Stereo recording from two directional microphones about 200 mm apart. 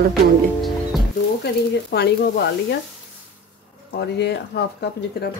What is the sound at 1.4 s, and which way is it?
Speech, 55° left (ahead or behind).